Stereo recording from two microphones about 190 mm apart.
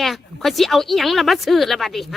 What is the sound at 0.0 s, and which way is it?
A woman's voice, centre (ahead or behind).